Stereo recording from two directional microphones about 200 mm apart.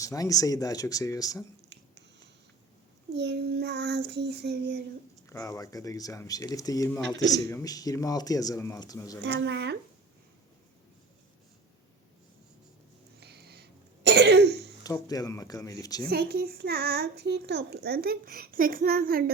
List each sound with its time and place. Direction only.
0.0 s speech: 15° left (ahead or behind)
3.2 s child singing: 55° right (ahead or behind)
5.2 s speech: 15° left (ahead or behind)
9.2 s child singing: 60° right (ahead or behind)
13.1 s cough: 55° right (ahead or behind)
14.8 s speech: 20° left (ahead or behind)
16.0 s a child's voice: 50° right (ahead or behind)